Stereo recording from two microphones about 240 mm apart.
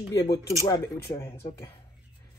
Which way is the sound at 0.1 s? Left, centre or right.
Centre.